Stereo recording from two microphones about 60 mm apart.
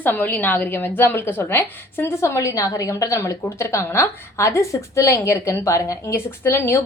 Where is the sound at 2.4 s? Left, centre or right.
Left.